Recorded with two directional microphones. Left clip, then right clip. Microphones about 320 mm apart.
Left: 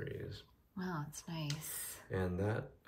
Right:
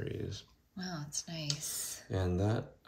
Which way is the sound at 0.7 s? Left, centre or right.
Centre.